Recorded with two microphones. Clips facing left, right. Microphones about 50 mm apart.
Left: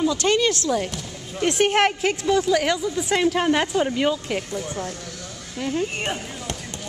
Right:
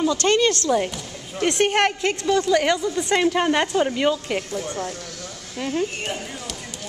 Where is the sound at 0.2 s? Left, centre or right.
Centre.